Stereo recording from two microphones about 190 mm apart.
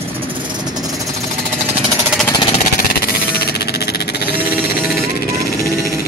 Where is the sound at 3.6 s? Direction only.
55° left (ahead or behind).